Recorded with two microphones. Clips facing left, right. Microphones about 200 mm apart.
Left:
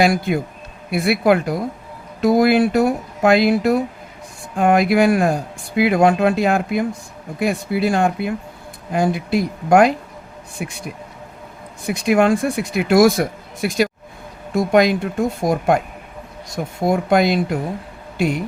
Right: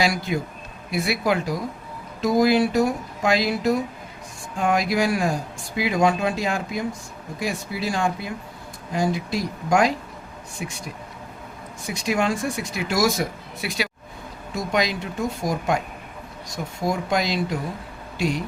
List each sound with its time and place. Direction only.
0.0 s speech: 55° left (ahead or behind)
11.9 s speech: 60° left (ahead or behind)